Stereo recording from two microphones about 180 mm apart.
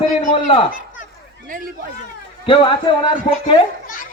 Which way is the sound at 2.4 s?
30° left (ahead or behind).